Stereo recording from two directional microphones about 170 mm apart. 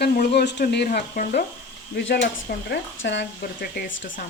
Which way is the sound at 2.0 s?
90° left.